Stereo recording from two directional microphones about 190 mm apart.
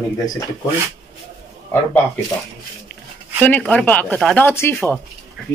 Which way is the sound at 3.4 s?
10° left (ahead or behind).